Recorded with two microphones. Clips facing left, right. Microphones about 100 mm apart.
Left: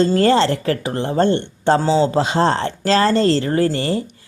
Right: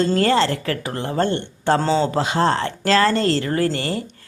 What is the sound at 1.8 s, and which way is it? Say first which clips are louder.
Speech: left 3 dB; 10° left (ahead or behind).